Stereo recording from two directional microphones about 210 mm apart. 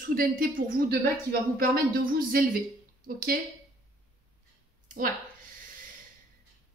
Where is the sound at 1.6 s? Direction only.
45° right (ahead or behind).